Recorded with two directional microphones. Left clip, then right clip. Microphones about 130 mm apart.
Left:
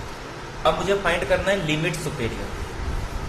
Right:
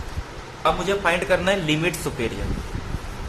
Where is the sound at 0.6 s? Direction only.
40° right (ahead or behind).